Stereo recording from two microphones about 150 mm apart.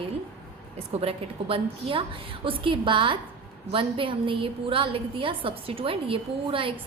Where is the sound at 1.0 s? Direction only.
35° right (ahead or behind).